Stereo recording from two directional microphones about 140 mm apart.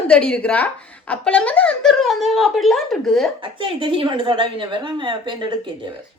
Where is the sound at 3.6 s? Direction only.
40° right (ahead or behind).